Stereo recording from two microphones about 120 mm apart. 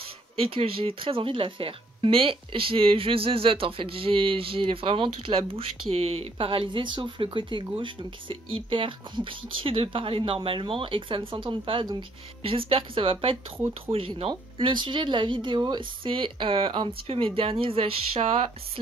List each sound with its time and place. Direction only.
0.4 s speech: 50° right (ahead or behind)